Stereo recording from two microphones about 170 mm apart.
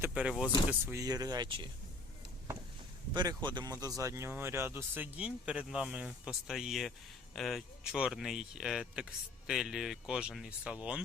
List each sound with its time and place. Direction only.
0.0 s speech: 5° right (ahead or behind); by 1.7 s 30° right (ahead or behind)
3.1 s speech: 25° right (ahead or behind); by 11.0 s 5° right (ahead or behind)